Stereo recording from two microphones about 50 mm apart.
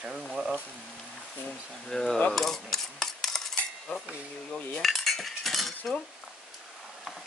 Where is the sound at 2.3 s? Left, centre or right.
Centre.